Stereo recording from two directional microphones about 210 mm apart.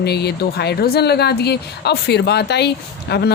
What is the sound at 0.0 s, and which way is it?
Speech, 50° left (ahead or behind).